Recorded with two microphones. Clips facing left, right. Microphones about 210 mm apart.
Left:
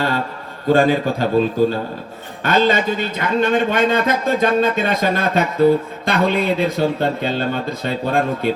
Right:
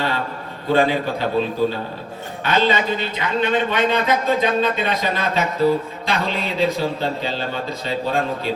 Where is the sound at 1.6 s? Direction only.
45° left (ahead or behind).